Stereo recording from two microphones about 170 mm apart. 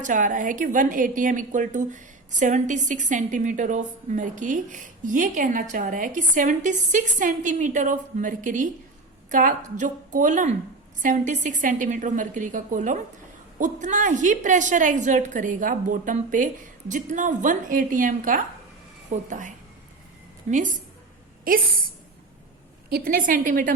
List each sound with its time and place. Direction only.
0.0 s a woman's voice: 50° right (ahead or behind)
22.9 s a woman's voice: 65° right (ahead or behind)